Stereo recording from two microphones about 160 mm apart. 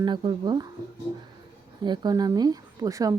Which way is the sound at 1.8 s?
25° right (ahead or behind).